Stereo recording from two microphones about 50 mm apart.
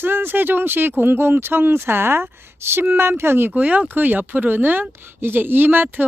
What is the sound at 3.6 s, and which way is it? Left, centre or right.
Speech, right.